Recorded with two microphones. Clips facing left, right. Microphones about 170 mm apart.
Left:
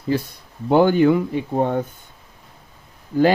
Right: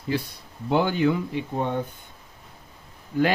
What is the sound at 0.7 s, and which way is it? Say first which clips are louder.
Speech: left 7 dB; 50° left (ahead or behind).